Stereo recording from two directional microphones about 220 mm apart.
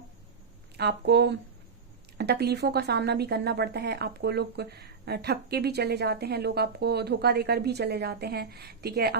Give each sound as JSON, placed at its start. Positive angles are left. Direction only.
{"t": 0.8, "sound": "a woman's voice", "side_deg": -50}